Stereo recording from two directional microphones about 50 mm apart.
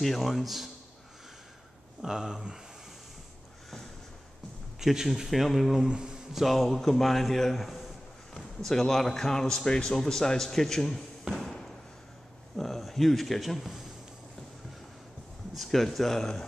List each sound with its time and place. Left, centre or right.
0.0 s speech: centre
2.0 s speech: centre
4.7 s speech: centre
5.9 s speech: centre
6.3 s speech: centre
7.6 s a sound: centre
8.4 s a man's voice: centre
11.3 s a sound: centre
12.5 s speech: centre
15.5 s speech: centre